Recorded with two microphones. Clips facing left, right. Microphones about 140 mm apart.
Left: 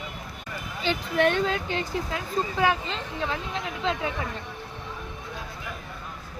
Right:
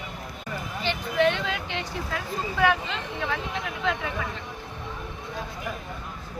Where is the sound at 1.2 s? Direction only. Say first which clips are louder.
Left 1 dB; 45° left (ahead or behind); by 4.1 s 25° left (ahead or behind).